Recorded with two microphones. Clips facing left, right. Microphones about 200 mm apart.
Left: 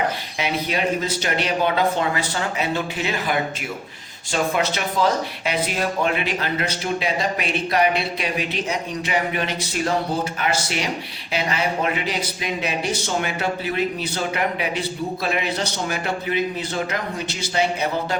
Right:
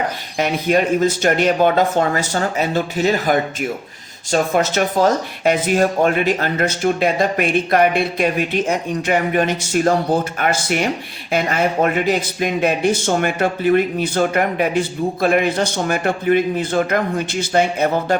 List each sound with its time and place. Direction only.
0.3 s speech: 50° right (ahead or behind)